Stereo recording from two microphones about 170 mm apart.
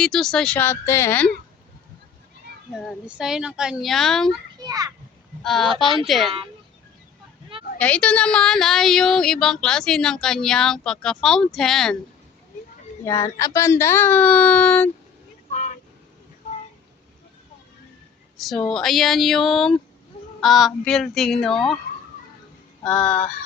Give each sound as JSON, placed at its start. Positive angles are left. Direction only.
{"t": 0.0, "sound": "speech", "side_deg": 5}
{"t": 2.7, "sound": "speech", "side_deg": -5}
{"t": 4.6, "sound": "a child's voice", "side_deg": -20}
{"t": 5.4, "sound": "speech", "side_deg": 0}
{"t": 7.8, "sound": "speech", "side_deg": 5}
{"t": 13.1, "sound": "speech", "side_deg": 20}
{"t": 15.5, "sound": "vehicle", "side_deg": 45}
{"t": 18.3, "sound": "speech", "side_deg": 0}
{"t": 22.8, "sound": "speech", "side_deg": 5}